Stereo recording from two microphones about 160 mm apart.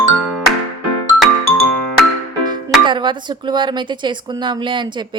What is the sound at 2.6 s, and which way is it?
Speech, 30° right (ahead or behind).